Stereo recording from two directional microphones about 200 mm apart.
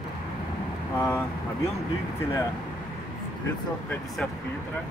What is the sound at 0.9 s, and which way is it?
Speech, 10° left (ahead or behind).